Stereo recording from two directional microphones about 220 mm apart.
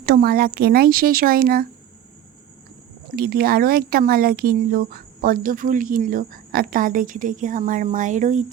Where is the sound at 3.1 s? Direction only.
45° right (ahead or behind).